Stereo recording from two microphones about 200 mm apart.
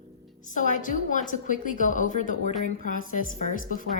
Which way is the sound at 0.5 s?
40° left (ahead or behind).